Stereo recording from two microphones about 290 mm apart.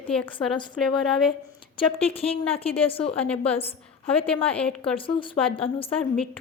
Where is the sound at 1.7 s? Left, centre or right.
Centre.